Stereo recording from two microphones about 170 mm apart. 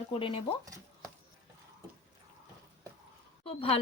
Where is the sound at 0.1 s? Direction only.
30° left (ahead or behind).